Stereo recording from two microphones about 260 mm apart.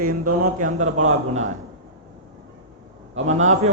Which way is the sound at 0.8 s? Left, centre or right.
Right.